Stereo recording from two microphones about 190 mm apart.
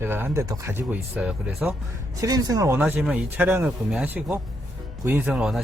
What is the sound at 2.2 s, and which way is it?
Speech, 20° right (ahead or behind).